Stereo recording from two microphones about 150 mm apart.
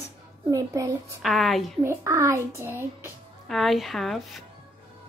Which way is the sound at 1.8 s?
20° right (ahead or behind).